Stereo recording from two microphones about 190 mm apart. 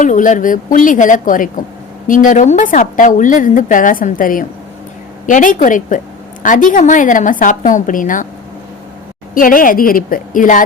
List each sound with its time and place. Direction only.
0.0 s a woman's voice: 40° left (ahead or behind)
9.3 s a woman's voice: 45° left (ahead or behind)